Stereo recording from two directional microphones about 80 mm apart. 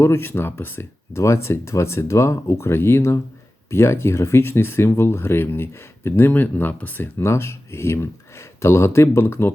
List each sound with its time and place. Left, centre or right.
0.0 s speech: left